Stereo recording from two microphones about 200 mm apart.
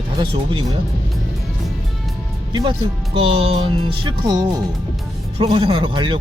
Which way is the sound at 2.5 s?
25° right (ahead or behind).